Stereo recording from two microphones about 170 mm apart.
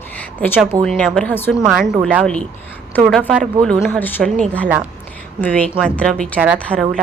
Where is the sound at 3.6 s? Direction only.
Centre (ahead or behind).